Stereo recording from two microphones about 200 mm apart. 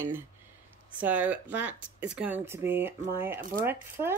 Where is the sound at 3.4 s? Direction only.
45° right (ahead or behind).